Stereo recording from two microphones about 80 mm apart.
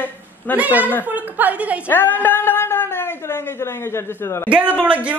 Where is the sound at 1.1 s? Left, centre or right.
Right.